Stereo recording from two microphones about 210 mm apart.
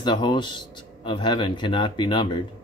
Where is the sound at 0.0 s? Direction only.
20° left (ahead or behind).